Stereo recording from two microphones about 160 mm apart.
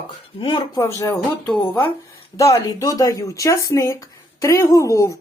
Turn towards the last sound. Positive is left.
turn(degrees=20)  # may be behind; listen again after turning